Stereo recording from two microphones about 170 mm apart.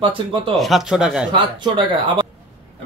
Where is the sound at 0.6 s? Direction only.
Centre (ahead or behind).